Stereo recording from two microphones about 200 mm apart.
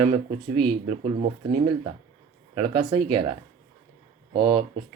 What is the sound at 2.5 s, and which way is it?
Speech, 30° right (ahead or behind).